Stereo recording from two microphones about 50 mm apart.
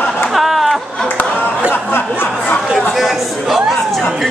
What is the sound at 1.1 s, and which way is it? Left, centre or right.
Chatter, left.